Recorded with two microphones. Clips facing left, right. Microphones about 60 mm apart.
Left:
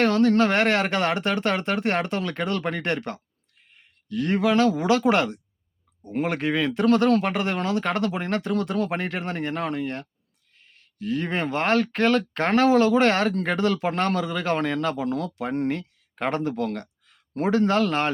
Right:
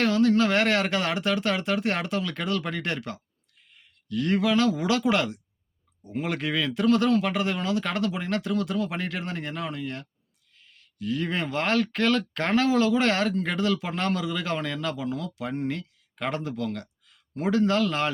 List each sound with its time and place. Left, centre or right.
0.0 s speech: left
3.8 s speech: left
6.8 s speech: left
15.1 s speech: left
15.6 s speech: left